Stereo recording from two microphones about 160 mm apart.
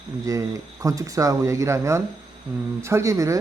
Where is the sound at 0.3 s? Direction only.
20° right (ahead or behind).